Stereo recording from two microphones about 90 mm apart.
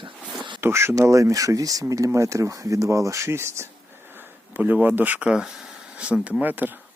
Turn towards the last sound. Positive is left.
turn(degrees=-20)  # may be behind; listen again after turning